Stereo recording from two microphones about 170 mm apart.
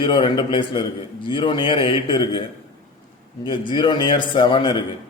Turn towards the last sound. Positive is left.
turn(degrees=25)  # may be behind; listen again after turning